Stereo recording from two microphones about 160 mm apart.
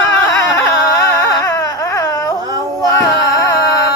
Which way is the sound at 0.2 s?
15° left (ahead or behind).